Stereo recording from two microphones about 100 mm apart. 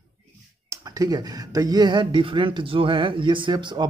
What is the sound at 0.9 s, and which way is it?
Speech, 40° right (ahead or behind).